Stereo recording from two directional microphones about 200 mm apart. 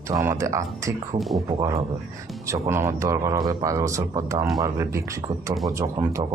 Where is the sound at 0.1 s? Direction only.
15° right (ahead or behind).